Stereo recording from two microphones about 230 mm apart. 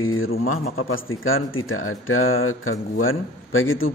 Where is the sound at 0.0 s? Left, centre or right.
Left.